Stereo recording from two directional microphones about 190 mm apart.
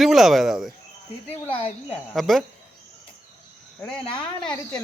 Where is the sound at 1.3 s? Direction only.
30° left (ahead or behind).